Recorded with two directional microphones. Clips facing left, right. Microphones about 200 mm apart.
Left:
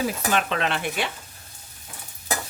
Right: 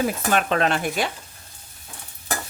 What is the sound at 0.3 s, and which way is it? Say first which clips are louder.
Stir: right 4 dB; 45° right (ahead or behind).